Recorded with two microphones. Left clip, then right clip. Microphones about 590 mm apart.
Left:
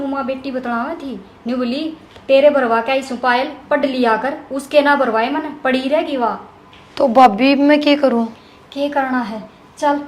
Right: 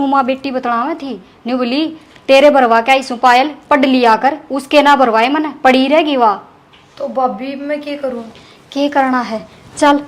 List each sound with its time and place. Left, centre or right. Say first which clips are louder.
0.1 s a woman's voice: right 8 dB; right
6.9 s a woman's voice: left 6 dB; left
8.7 s a woman's voice: right 5 dB; right